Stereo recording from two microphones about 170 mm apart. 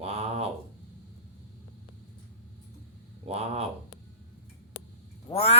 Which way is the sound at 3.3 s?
35° right (ahead or behind).